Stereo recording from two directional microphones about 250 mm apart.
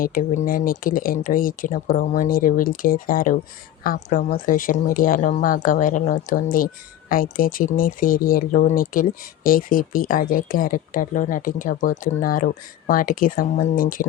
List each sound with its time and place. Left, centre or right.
0.0 s speech: left